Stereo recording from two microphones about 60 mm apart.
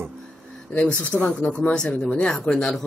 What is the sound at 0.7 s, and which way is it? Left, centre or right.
Speech, left.